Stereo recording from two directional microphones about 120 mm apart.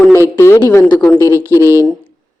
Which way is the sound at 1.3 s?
25° right (ahead or behind).